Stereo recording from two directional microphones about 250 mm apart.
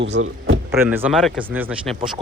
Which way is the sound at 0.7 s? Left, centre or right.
Centre.